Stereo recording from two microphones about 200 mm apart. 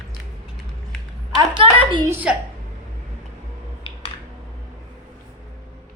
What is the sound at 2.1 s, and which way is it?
Speech, 10° right (ahead or behind).